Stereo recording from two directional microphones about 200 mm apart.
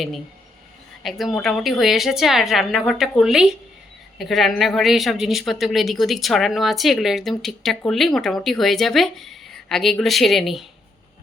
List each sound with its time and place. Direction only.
1.0 s speech: centre (ahead or behind)